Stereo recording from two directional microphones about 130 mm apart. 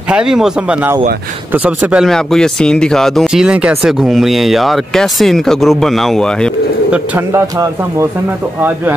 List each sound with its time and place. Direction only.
0.1 s speech: 5° right (ahead or behind)
7.2 s a man's voice: 20° right (ahead or behind)